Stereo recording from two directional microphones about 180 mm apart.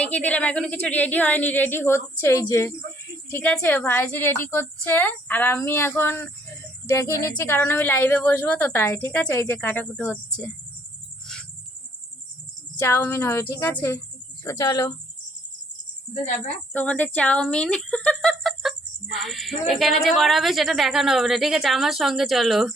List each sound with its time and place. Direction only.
0.0 s a woman's voice: 10° left (ahead or behind)
12.8 s a woman's voice: 15° left (ahead or behind)
16.7 s speech: 10° left (ahead or behind)